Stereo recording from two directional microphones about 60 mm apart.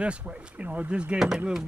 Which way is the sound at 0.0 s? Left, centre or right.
Right.